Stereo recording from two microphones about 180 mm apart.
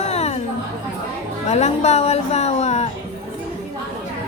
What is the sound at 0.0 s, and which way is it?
Chatter, 35° left (ahead or behind).